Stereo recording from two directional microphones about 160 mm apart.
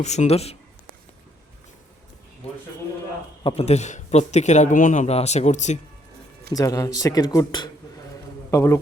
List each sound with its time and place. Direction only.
0.0 s speech: 45° left (ahead or behind)
3.4 s speech: 40° left (ahead or behind)
6.5 s a man's voice: 20° left (ahead or behind)